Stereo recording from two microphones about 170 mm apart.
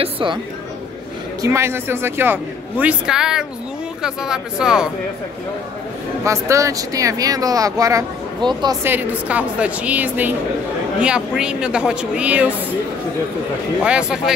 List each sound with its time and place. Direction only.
0.0 s speech: 30° right (ahead or behind)
1.4 s a man's voice: 15° right (ahead or behind)
6.2 s speech: 20° right (ahead or behind)
8.8 s a man's voice: 10° right (ahead or behind)
13.8 s a woman's voice: 5° right (ahead or behind)